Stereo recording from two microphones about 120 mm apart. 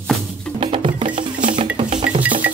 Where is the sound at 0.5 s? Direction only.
50° right (ahead or behind).